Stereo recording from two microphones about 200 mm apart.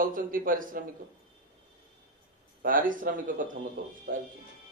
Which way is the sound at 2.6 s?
45° right (ahead or behind).